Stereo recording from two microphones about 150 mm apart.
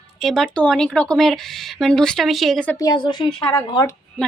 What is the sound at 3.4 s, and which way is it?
Speech, 20° left (ahead or behind).